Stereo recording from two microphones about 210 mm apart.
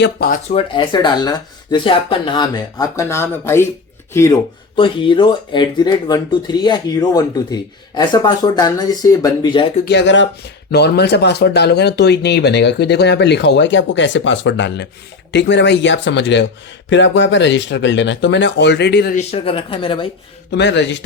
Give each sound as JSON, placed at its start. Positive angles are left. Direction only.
{"t": 0.0, "sound": "speech", "side_deg": 45}
{"t": 0.5, "sound": "speech", "side_deg": 25}
{"t": 4.8, "sound": "speech", "side_deg": 25}
{"t": 9.8, "sound": "speech", "side_deg": 55}
{"t": 19.1, "sound": "speech", "side_deg": 25}
{"t": 20.5, "sound": "speech", "side_deg": 55}